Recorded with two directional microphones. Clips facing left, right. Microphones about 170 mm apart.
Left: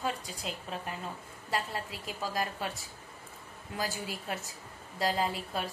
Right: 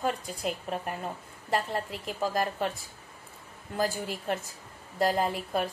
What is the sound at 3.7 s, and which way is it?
A woman's voice, 50° right (ahead or behind).